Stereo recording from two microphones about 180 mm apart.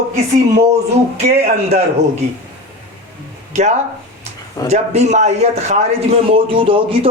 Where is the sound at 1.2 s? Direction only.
40° right (ahead or behind).